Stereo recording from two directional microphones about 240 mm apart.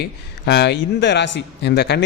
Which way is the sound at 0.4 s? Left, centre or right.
Left.